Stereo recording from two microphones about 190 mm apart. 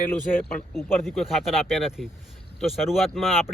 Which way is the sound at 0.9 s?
Centre (ahead or behind).